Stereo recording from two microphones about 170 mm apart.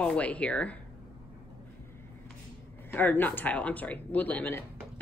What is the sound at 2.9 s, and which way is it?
Speech, 10° left (ahead or behind).